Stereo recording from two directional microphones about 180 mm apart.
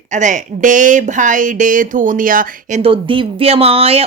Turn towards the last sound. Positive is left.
turn(degrees=-35)  # may be behind; listen again after turning